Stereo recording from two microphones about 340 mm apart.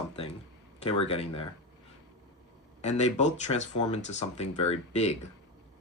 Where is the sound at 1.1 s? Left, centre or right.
Centre.